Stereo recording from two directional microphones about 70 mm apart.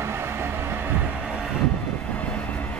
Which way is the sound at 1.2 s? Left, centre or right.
Centre.